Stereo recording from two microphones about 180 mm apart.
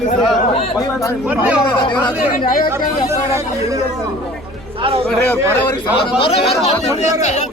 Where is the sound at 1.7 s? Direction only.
25° left (ahead or behind).